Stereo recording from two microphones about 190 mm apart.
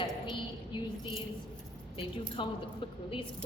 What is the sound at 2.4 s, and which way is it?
Speech, 25° left (ahead or behind).